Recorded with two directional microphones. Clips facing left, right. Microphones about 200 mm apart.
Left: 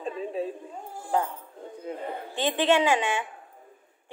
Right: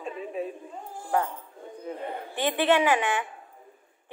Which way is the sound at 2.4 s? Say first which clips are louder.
Even; 15° left (ahead or behind).